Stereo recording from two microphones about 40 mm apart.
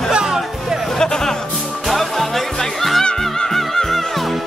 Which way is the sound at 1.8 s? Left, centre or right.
Centre.